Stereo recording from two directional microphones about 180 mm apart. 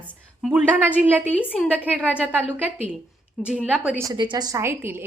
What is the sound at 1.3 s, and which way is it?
Speech, 10° left (ahead or behind).